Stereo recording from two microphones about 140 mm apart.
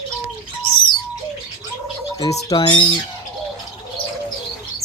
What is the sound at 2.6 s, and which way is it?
Speech, 35° left (ahead or behind).